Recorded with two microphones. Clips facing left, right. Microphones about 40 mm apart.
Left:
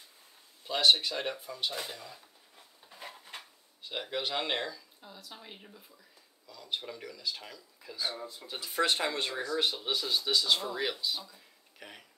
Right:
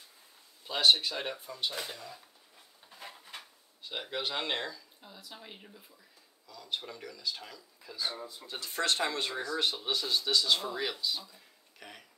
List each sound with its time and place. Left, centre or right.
0.7 s speech: centre
3.8 s speech: centre